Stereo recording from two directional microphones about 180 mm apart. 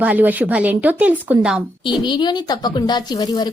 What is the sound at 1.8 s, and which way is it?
A woman's voice, 25° left (ahead or behind).